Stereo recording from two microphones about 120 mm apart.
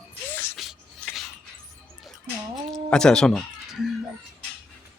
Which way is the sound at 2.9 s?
5° left (ahead or behind).